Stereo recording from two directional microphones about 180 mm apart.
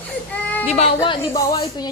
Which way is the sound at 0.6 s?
35° left (ahead or behind).